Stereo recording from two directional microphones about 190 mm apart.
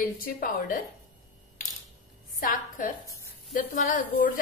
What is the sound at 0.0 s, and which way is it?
Speech, 50° left (ahead or behind).